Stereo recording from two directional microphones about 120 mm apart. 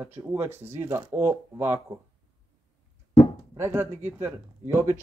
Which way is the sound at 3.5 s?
20° right (ahead or behind).